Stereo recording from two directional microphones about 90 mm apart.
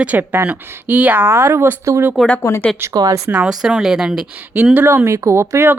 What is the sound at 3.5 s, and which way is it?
Speech, 5° right (ahead or behind).